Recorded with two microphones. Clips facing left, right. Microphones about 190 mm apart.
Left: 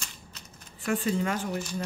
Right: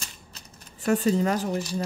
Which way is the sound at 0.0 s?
40° right (ahead or behind).